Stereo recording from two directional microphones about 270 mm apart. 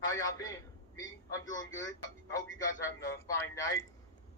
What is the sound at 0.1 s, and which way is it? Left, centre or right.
Speech, centre.